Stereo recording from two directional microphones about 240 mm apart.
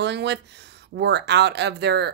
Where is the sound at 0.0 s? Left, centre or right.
Right.